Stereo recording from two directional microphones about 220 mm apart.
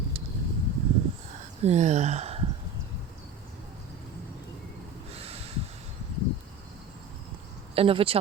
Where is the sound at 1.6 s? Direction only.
30° right (ahead or behind).